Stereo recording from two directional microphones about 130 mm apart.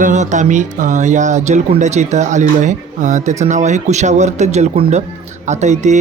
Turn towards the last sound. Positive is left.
turn(degrees=-65)  # may be behind; listen again after turning